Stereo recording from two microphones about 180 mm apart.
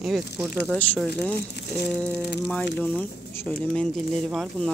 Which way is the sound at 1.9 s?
5° left (ahead or behind).